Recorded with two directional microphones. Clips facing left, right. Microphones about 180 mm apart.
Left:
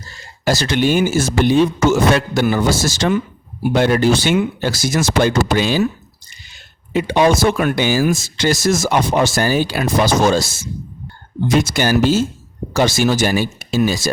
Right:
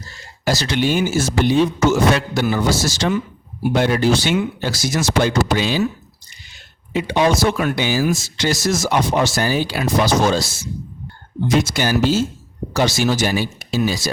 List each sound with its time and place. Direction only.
0.4 s speech: 50° left (ahead or behind)
6.9 s speech: 50° left (ahead or behind)